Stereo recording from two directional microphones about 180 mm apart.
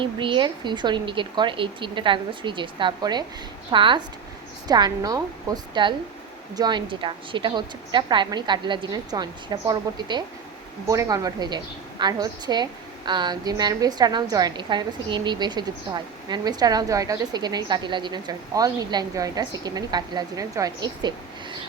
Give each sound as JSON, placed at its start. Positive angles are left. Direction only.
{"t": 0.0, "sound": "a woman's voice", "side_deg": -30}